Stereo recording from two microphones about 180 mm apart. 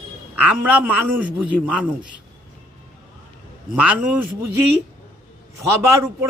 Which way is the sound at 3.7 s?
10° right (ahead or behind).